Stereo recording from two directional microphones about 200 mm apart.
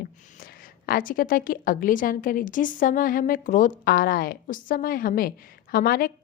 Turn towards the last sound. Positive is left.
turn(degrees=50)  # may be behind; listen again after turning